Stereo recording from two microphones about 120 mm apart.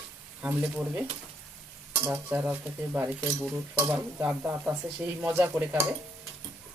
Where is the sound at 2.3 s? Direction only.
15° right (ahead or behind).